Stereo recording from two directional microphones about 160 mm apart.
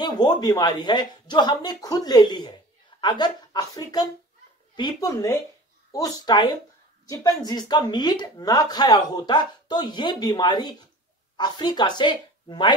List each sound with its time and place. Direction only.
0.0 s speech: 25° left (ahead or behind)